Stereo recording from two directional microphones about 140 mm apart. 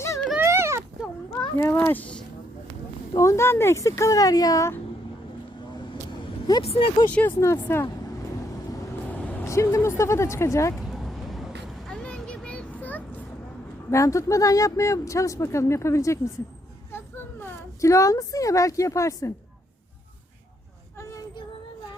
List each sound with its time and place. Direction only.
0.3 s a sound: 20° right (ahead or behind)
1.4 s speech: 20° left (ahead or behind)
3.2 s speech: 20° left (ahead or behind)
6.6 s speech: 45° left (ahead or behind)
7.1 s speech: 10° left (ahead or behind)
10.8 s vehicle: centre (ahead or behind)
13.9 s a woman's voice: 20° left (ahead or behind)